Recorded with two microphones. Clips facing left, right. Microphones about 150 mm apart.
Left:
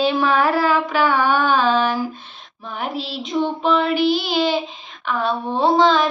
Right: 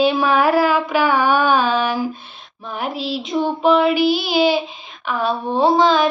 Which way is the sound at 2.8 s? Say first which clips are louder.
Right 3 dB; centre (ahead or behind).